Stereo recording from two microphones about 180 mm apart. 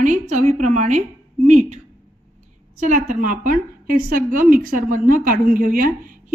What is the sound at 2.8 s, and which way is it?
A woman's voice, 45° right (ahead or behind).